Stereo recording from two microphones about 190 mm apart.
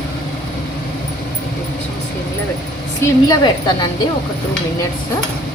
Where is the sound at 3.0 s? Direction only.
20° left (ahead or behind).